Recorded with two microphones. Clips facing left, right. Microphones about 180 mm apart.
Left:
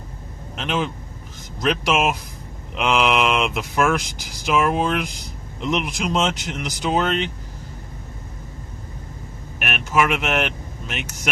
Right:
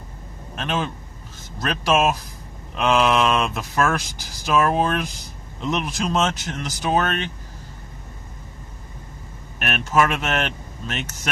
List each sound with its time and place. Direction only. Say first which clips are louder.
0.5 s speech: left 1 dB; 15° left (ahead or behind)
9.6 s speech: right 1 dB; 10° left (ahead or behind)